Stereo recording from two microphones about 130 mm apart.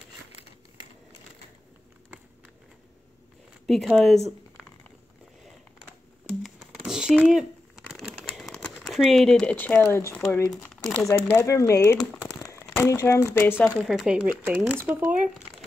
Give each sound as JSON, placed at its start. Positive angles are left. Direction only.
{"t": 3.6, "sound": "speech", "side_deg": 0}
{"t": 6.4, "sound": "crumpling", "side_deg": 0}
{"t": 10.7, "sound": "speech", "side_deg": 5}
{"t": 11.3, "sound": "speech", "side_deg": 20}
{"t": 12.2, "sound": "a sound", "side_deg": 25}
{"t": 13.7, "sound": "speech", "side_deg": 0}